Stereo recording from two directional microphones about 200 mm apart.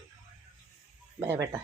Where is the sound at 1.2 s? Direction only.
15° right (ahead or behind).